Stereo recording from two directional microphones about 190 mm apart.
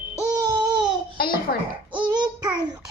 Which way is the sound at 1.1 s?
50° left (ahead or behind).